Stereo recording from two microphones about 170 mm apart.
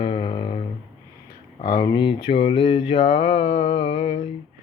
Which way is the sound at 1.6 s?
25° left (ahead or behind).